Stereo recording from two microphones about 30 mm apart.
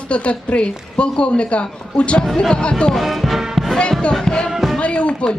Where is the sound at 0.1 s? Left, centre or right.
Left.